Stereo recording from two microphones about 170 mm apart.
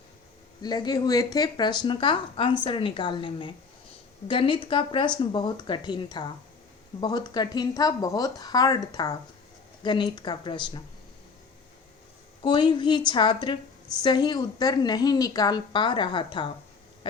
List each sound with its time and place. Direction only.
0.6 s a woman's voice: 25° left (ahead or behind)
12.4 s a woman's voice: 25° left (ahead or behind)